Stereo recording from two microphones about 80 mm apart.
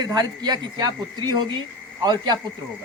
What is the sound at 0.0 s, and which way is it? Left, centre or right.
Speech, right.